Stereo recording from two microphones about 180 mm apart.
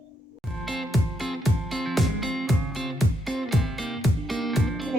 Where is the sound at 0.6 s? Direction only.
Centre (ahead or behind).